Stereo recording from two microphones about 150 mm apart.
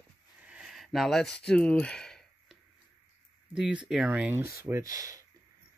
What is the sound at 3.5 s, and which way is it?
Speech, 5° right (ahead or behind).